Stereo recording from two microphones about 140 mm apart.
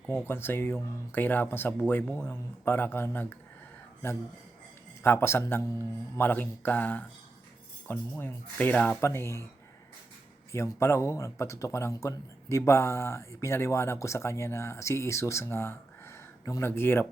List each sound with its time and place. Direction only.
0.1 s speech: 15° left (ahead or behind)
5.0 s speech: 15° left (ahead or behind)
10.5 s speech: 20° left (ahead or behind)